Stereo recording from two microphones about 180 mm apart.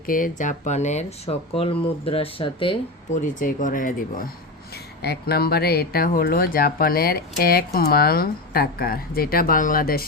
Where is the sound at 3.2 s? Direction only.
45° left (ahead or behind).